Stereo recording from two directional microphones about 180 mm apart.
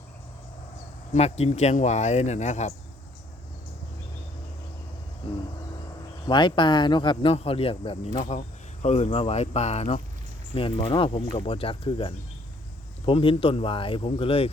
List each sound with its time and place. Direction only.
1.1 s speech: 40° left (ahead or behind)
5.2 s a sound: 30° left (ahead or behind)
6.2 s speech: 25° left (ahead or behind)